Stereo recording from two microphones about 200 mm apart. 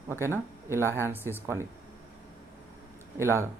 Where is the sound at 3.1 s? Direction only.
15° right (ahead or behind).